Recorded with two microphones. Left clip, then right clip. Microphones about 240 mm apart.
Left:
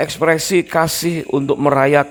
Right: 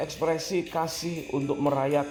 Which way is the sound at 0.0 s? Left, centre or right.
Left.